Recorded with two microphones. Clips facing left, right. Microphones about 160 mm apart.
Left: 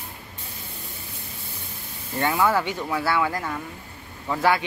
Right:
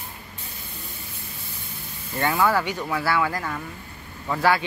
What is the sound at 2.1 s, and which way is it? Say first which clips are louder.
Speech: even; 20° left (ahead or behind).